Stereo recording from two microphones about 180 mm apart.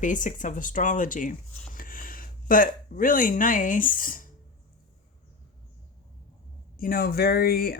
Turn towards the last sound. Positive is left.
turn(degrees=60)  # may be behind; listen again after turning